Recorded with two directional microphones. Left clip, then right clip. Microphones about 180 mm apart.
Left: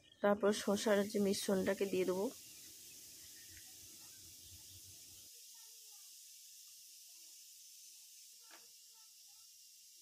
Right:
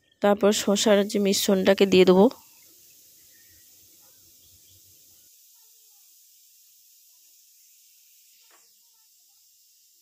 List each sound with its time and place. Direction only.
0.2 s speech: 40° right (ahead or behind); by 2.3 s 55° right (ahead or behind)